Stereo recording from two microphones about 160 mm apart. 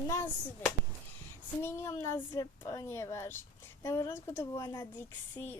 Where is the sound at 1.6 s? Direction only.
15° left (ahead or behind).